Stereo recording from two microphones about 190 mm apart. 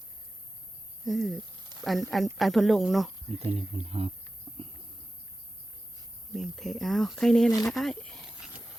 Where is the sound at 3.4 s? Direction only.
30° right (ahead or behind).